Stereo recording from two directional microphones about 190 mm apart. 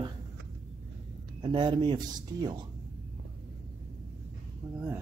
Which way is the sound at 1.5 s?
25° right (ahead or behind).